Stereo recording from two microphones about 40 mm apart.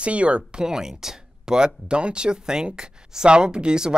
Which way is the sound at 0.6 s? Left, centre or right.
Centre.